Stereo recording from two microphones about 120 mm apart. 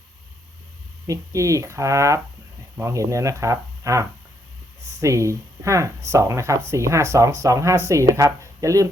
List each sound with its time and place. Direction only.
1.0 s speech: 25° right (ahead or behind)